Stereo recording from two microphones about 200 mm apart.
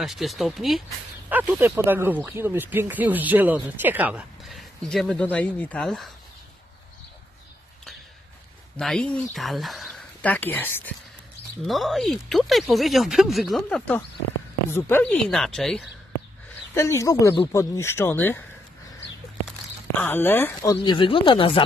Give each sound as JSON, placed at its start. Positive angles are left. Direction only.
{"t": 0.0, "sound": "speech", "side_deg": 0}
{"t": 8.7, "sound": "speech", "side_deg": 5}
{"t": 16.7, "sound": "speech", "side_deg": 15}
{"t": 19.9, "sound": "speech", "side_deg": 10}